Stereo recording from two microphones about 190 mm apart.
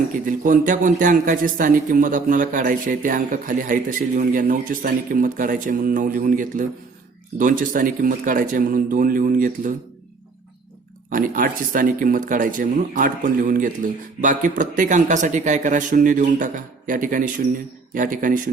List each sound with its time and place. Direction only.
0.1 s a man's voice: 45° right (ahead or behind)
11.1 s a man's voice: 45° right (ahead or behind)